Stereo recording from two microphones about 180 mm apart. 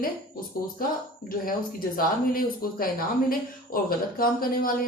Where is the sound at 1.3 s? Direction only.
55° left (ahead or behind).